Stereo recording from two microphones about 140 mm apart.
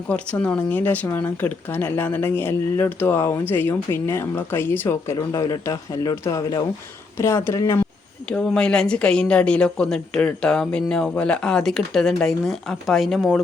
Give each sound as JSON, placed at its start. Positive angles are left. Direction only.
{"t": 0.1, "sound": "speech", "side_deg": 10}
{"t": 8.3, "sound": "speech", "side_deg": 5}